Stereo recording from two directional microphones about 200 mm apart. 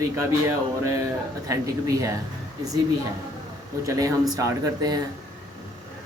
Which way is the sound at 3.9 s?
15° right (ahead or behind).